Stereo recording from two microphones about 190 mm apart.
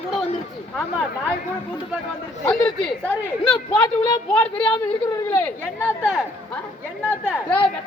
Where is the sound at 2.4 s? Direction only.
5° left (ahead or behind).